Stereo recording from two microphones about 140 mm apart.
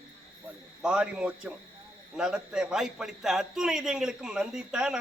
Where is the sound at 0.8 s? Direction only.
5° right (ahead or behind).